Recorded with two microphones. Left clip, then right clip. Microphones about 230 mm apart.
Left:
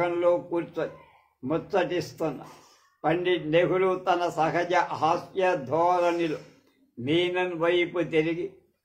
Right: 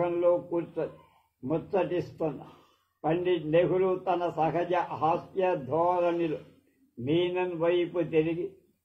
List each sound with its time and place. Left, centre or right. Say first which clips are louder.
0.0 s a man's voice: left 2 dB; left